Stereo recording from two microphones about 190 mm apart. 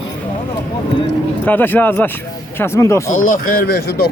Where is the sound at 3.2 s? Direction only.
45° left (ahead or behind).